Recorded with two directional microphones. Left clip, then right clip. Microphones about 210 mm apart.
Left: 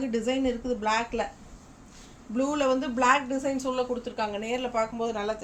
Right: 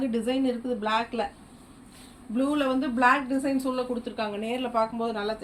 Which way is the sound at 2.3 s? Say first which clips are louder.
Left 1 dB; 20° left (ahead or behind).